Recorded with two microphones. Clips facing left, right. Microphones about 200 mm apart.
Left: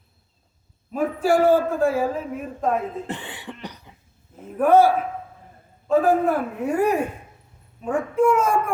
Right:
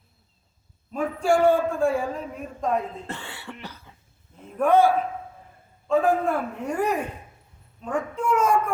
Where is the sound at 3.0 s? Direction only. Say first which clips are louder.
Left 4 dB; 15° left (ahead or behind).